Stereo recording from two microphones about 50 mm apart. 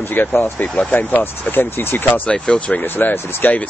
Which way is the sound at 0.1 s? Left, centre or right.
Left.